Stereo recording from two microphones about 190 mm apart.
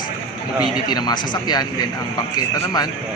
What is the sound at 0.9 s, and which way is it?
Speech, 20° left (ahead or behind).